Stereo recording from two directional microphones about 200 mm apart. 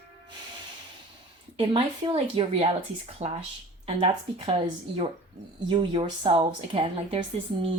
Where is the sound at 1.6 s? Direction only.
30° right (ahead or behind).